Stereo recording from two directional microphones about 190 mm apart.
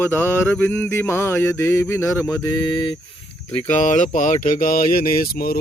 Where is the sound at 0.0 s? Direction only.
10° left (ahead or behind).